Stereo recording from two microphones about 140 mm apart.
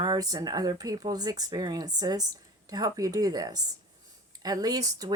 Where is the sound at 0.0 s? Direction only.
25° right (ahead or behind).